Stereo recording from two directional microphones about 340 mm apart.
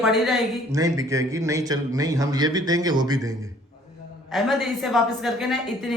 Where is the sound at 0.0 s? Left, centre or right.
Centre.